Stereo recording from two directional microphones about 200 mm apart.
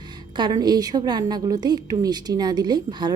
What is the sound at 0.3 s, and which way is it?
A woman's voice, 20° right (ahead or behind).